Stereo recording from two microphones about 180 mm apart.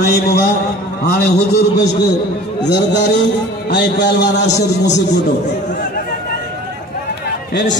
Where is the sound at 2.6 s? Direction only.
75° left (ahead or behind).